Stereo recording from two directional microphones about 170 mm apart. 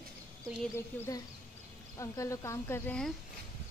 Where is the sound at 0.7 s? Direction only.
15° left (ahead or behind).